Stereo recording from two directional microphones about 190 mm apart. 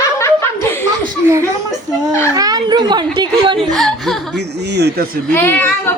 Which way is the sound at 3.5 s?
Centre (ahead or behind).